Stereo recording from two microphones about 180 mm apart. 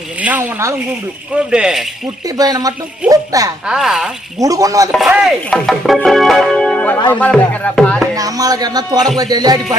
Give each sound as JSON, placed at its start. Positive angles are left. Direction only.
{"t": 0.2, "sound": "speech", "side_deg": -10}
{"t": 2.2, "sound": "speech", "side_deg": -20}
{"t": 3.7, "sound": "speech", "side_deg": -5}
{"t": 4.4, "sound": "speech", "side_deg": -20}
{"t": 4.9, "sound": "speech", "side_deg": -5}
{"t": 8.1, "sound": "speech", "side_deg": -20}